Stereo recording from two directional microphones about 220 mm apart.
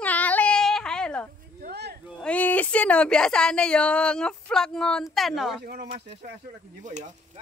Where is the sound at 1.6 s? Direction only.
50° right (ahead or behind).